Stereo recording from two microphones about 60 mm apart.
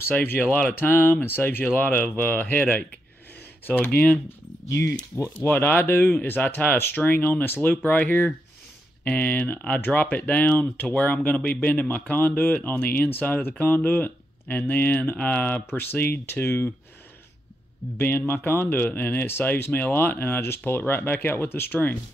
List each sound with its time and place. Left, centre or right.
0.1 s speech: left
3.6 s speech: left
4.6 s speech: left
5.4 s speech: left
17.9 s speech: left